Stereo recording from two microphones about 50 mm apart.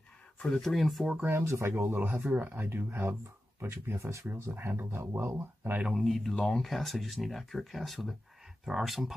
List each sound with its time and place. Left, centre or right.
0.5 s speech: centre
1.3 s speech: right
2.0 s speech: right
2.6 s speech: right
5.9 s speech: centre